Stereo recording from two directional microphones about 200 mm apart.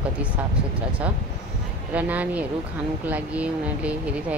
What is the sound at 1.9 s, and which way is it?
Speech, 5° right (ahead or behind).